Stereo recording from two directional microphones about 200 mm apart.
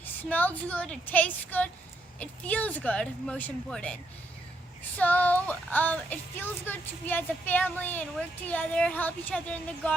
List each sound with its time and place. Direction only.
0.0 s speech: 10° left (ahead or behind)
4.9 s speech: 10° left (ahead or behind)